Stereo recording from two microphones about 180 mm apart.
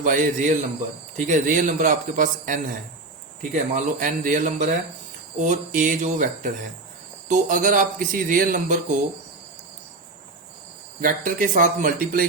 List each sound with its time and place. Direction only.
0.0 s speech: 45° right (ahead or behind)
11.0 s speech: 50° right (ahead or behind)